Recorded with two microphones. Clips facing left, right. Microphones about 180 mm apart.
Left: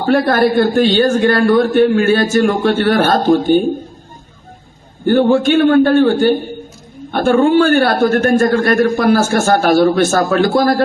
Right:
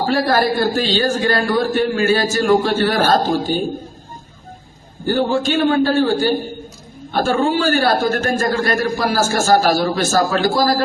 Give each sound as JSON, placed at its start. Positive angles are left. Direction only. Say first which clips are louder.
{"t": 0.0, "sound": "a man's voice", "louder": "left 4 dB", "side_deg": 55}
{"t": 5.1, "sound": "a man's voice", "louder": "left 6 dB", "side_deg": 60}